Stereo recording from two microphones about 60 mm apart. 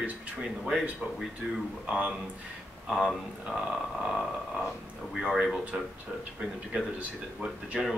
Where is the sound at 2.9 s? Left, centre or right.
Centre.